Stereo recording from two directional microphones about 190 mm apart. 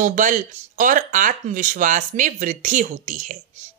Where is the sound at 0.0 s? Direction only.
45° right (ahead or behind).